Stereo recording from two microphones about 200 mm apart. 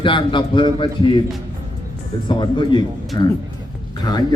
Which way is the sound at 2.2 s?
25° left (ahead or behind).